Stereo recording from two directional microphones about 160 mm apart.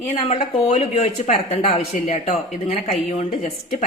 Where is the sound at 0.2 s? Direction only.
35° left (ahead or behind).